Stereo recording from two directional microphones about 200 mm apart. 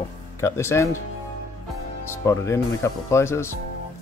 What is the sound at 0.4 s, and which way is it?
Speech, 15° left (ahead or behind).